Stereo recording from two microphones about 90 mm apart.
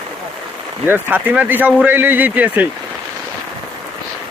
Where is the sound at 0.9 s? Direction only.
25° right (ahead or behind).